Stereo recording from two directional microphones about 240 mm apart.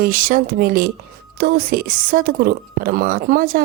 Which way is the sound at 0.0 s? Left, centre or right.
Right.